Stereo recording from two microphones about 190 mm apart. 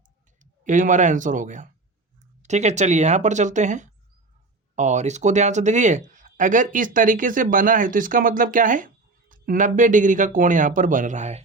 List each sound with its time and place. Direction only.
0.6 s speech: 40° right (ahead or behind)